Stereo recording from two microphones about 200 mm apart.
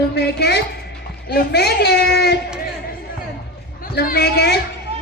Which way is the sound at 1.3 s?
55° left (ahead or behind).